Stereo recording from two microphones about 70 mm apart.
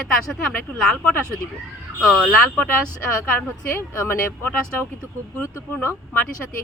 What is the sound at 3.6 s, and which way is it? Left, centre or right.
Speech, left.